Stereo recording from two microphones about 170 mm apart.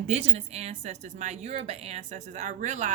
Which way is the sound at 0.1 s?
35° right (ahead or behind).